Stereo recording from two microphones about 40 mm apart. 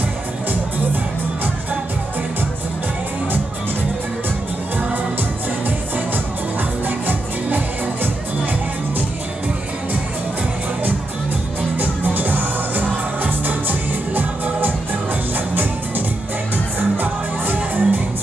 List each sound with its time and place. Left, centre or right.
7.1 s music: right
11.8 s music: right
16.9 s music: right